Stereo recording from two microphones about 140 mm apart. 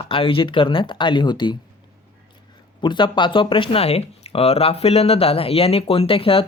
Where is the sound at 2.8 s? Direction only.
35° left (ahead or behind).